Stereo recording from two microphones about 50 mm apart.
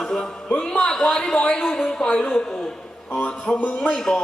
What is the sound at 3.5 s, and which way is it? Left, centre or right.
Speech, left.